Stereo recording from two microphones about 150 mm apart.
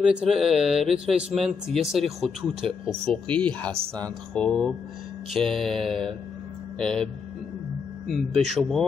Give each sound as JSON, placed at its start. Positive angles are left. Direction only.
{"t": 0.0, "sound": "speech", "side_deg": -5}
{"t": 8.3, "sound": "speech", "side_deg": -50}
{"t": 8.5, "sound": "speech", "side_deg": 0}